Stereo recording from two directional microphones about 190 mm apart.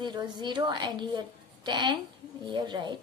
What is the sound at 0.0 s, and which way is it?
A woman's voice, 25° right (ahead or behind).